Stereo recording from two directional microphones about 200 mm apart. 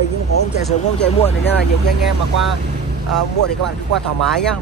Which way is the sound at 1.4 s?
55° left (ahead or behind).